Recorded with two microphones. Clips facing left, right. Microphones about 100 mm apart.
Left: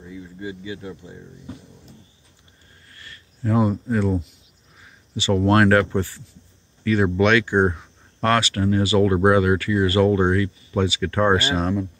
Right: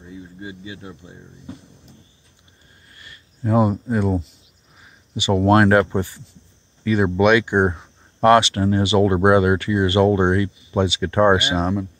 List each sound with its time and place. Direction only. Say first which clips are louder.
0.1 s speech: left 2 dB; 25° right (ahead or behind)
2.9 s a sound: left 1 dB; 15° right (ahead or behind)
5.1 s speech: right 2 dB; 15° right (ahead or behind)